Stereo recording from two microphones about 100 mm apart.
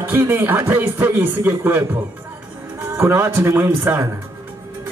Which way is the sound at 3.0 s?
20° right (ahead or behind).